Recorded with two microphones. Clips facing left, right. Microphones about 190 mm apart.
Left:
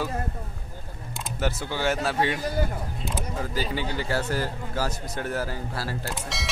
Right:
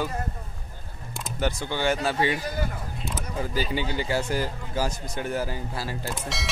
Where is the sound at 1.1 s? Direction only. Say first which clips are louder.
Right 1 dB; centre (ahead or behind).